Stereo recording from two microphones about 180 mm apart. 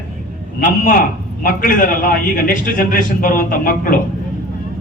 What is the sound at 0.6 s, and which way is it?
A man's voice, 50° left (ahead or behind).